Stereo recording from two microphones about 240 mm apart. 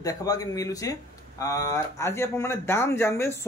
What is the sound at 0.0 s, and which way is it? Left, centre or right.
Speech, centre.